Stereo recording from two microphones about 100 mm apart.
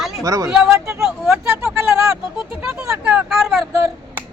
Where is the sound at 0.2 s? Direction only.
35° right (ahead or behind).